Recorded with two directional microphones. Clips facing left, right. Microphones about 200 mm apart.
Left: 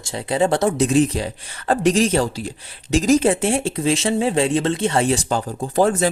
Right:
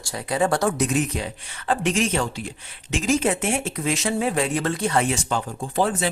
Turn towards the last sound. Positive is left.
turn(degrees=45)  # may be behind; listen again after turning